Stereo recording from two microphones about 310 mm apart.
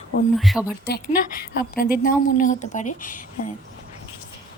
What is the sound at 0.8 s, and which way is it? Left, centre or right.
Speech, left.